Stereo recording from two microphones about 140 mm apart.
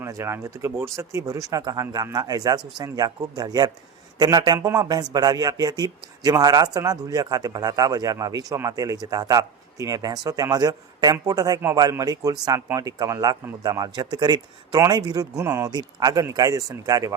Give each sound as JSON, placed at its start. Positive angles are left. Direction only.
{"t": 0.0, "sound": "speech", "side_deg": -20}